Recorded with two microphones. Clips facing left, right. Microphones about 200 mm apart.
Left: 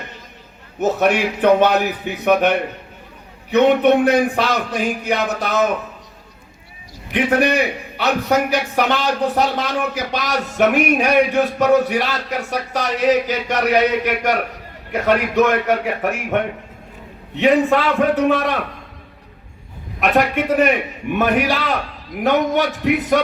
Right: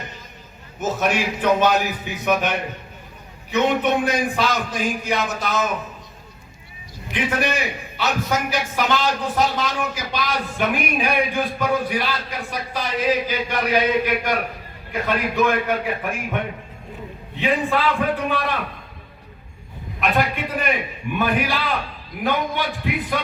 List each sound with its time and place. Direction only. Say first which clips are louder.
0.8 s speech: left 5 dB; 60° left (ahead or behind)
7.1 s a man's voice: left 6 dB; 60° left (ahead or behind)
20.0 s a man's voice: left 5 dB; 75° left (ahead or behind)